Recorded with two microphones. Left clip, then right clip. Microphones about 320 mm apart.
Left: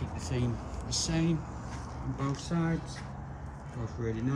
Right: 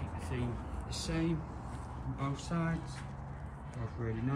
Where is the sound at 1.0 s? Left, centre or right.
Centre.